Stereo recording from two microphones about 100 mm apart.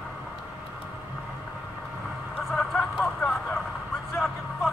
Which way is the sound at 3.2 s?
20° left (ahead or behind).